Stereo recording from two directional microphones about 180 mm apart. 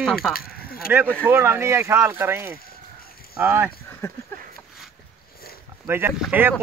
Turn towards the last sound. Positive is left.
turn(degrees=-10)  # may be behind; listen again after turning